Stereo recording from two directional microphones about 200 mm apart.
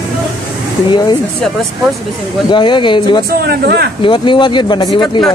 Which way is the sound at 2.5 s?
25° left (ahead or behind).